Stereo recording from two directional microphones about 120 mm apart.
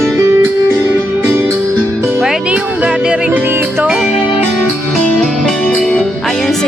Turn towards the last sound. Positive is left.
turn(degrees=5)  # may be behind; listen again after turning